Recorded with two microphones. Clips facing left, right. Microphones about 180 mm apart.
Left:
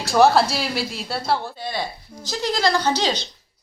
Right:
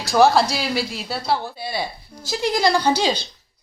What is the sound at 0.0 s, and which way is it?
A child's voice, centre (ahead or behind).